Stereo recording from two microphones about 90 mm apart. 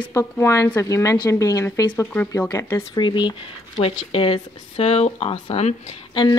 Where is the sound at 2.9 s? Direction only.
60° left (ahead or behind); by 5.4 s 90° left.